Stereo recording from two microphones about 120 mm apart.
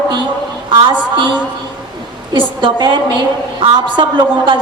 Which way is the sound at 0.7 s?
40° right (ahead or behind).